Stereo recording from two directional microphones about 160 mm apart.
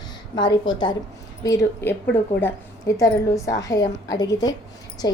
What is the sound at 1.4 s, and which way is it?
A woman's voice, 15° left (ahead or behind).